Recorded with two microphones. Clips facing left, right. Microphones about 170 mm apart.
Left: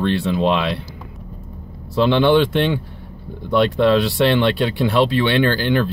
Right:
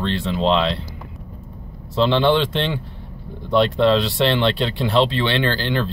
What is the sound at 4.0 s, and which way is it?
Speech, 55° left (ahead or behind).